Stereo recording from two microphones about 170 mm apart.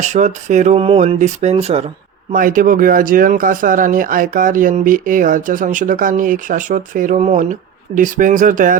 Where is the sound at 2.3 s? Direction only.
55° right (ahead or behind).